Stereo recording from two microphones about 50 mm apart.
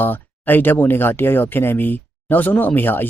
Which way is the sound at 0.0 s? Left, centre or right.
Left.